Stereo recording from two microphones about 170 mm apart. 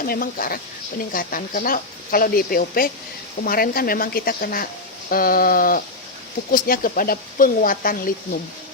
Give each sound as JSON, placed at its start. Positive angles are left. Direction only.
{"t": 0.0, "sound": "speech", "side_deg": 55}